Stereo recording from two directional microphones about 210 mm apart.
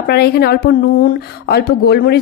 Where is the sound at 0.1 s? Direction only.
50° left (ahead or behind).